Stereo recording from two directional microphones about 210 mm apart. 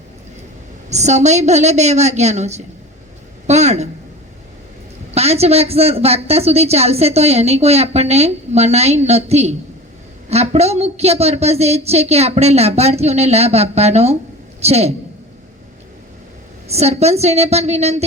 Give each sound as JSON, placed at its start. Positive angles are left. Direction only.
{"t": 0.9, "sound": "a woman's voice", "side_deg": -30}
{"t": 5.1, "sound": "a man's voice", "side_deg": -30}
{"t": 16.6, "sound": "a woman's voice", "side_deg": -30}